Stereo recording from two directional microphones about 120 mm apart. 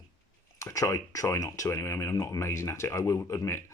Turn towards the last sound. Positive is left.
turn(degrees=25)  # may be behind; listen again after turning